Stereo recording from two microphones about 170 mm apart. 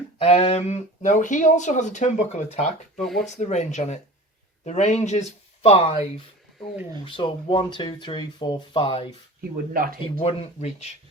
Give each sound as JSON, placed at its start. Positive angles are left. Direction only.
{"t": 0.2, "sound": "speech", "side_deg": 35}
{"t": 3.0, "sound": "speech", "side_deg": 0}
{"t": 3.2, "sound": "speech", "side_deg": 40}
{"t": 9.7, "sound": "speech", "side_deg": -60}
{"t": 10.2, "sound": "speech", "side_deg": 40}